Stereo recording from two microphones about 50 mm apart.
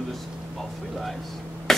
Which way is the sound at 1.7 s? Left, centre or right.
Centre.